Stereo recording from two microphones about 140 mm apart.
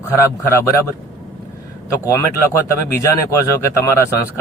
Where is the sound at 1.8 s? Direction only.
20° left (ahead or behind).